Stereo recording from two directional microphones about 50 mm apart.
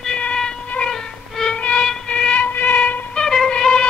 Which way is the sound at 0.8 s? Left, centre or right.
Centre.